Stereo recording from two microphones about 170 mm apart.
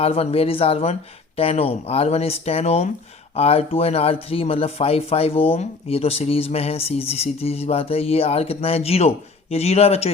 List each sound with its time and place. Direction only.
0.0 s speech: 35° left (ahead or behind)